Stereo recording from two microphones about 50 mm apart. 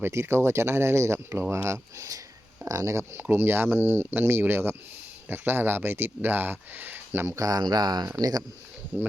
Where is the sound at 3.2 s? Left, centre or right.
Right.